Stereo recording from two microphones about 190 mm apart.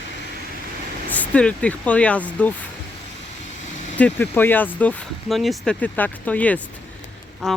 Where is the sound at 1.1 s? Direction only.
5° left (ahead or behind).